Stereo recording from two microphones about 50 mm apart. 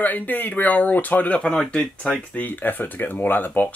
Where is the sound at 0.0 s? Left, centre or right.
Left.